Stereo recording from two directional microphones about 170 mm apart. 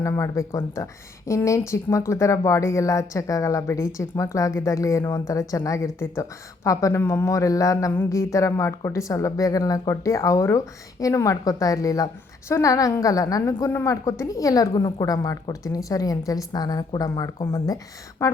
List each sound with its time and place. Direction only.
0.0 s a woman's voice: 15° left (ahead or behind)